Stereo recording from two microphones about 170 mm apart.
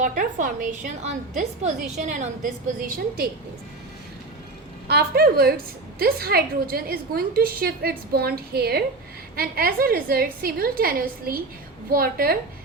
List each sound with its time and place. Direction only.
0.0 s a woman's voice: 50° right (ahead or behind)
4.9 s a woman's voice: 65° right (ahead or behind)